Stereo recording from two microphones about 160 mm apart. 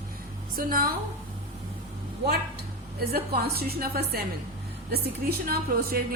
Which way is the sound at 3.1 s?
75° right (ahead or behind).